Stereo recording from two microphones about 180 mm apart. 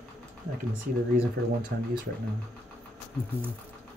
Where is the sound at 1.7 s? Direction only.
60° right (ahead or behind).